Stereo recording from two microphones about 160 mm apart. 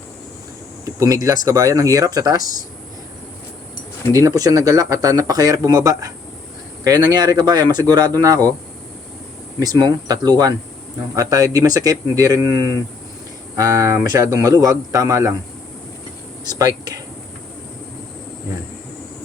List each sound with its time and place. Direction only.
0.9 s speech: 20° right (ahead or behind)
4.1 s speech: 20° right (ahead or behind)
9.6 s speech: 25° right (ahead or behind)
16.4 s speech: 25° right (ahead or behind)